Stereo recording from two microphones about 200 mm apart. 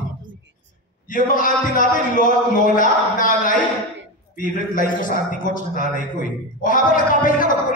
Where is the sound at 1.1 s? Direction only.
40° left (ahead or behind).